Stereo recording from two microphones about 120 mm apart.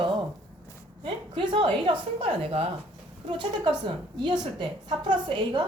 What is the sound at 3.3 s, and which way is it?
A woman's voice, 40° right (ahead or behind).